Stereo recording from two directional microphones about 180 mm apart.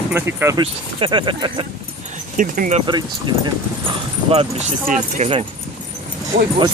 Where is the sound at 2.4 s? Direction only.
45° right (ahead or behind).